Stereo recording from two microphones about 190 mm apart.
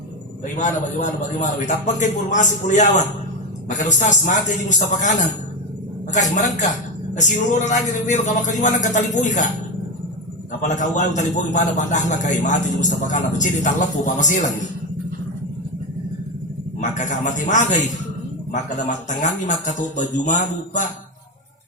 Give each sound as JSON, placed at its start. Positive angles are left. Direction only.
{"t": 0.5, "sound": "a man's voice", "side_deg": 40}
{"t": 6.3, "sound": "a man's voice", "side_deg": 40}
{"t": 10.6, "sound": "a man's voice", "side_deg": 40}
{"t": 17.0, "sound": "a man's voice", "side_deg": 40}